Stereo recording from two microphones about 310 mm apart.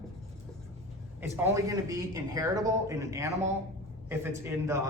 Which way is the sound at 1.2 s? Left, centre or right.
Centre.